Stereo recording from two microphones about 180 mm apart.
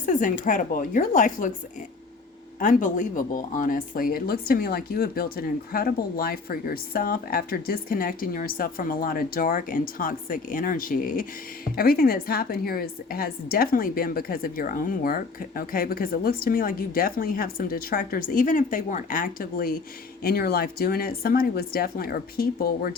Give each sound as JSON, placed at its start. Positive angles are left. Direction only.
{"t": 0.0, "sound": "speech", "side_deg": 45}
{"t": 2.6, "sound": "speech", "side_deg": 45}